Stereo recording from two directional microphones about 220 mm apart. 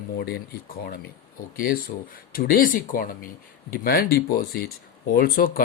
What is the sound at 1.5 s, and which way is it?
Speech, 40° left (ahead or behind).